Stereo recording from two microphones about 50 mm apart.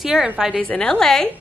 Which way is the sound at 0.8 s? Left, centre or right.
Centre.